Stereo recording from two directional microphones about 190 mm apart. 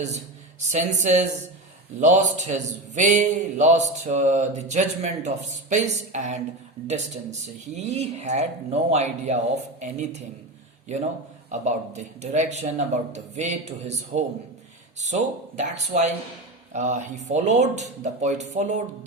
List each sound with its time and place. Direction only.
0.7 s a man's voice: 40° right (ahead or behind)
11.4 s a man's voice: 35° right (ahead or behind)